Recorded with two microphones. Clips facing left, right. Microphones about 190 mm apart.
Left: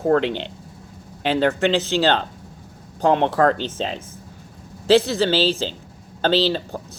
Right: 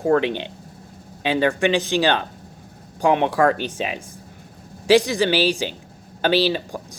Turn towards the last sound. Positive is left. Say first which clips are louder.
# even
turn(degrees=-15)  # may be behind; listen again after turning